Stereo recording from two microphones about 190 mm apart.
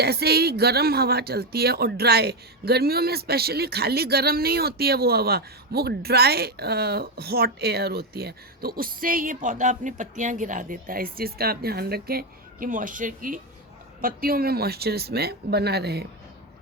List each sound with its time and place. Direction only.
0.0 s speech: 55° right (ahead or behind)